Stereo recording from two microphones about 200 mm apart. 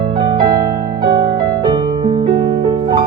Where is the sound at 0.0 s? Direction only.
25° right (ahead or behind).